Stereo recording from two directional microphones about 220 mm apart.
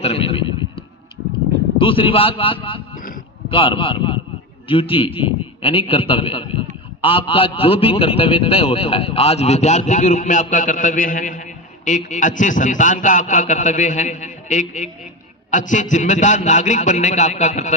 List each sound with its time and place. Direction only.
0.0 s speech: 25° left (ahead or behind)
1.8 s a man's voice: 25° left (ahead or behind)